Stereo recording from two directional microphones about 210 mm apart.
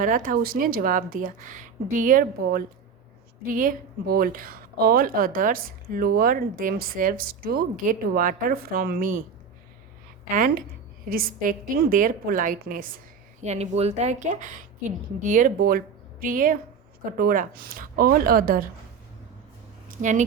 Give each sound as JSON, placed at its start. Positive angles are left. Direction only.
{"t": 0.0, "sound": "a woman's voice", "side_deg": -40}
{"t": 10.3, "sound": "a woman's voice", "side_deg": -40}
{"t": 13.4, "sound": "a woman's voice", "side_deg": -30}
{"t": 20.0, "sound": "a woman's voice", "side_deg": -35}